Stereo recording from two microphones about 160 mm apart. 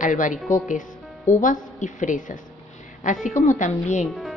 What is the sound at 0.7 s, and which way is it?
A woman's voice, 55° left (ahead or behind).